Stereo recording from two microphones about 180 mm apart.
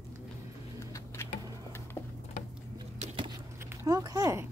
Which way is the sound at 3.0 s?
30° right (ahead or behind).